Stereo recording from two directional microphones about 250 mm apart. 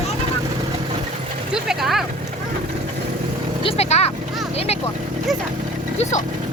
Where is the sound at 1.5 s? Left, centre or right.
Centre.